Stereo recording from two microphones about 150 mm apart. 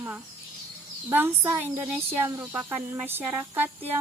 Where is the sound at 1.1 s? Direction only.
15° right (ahead or behind).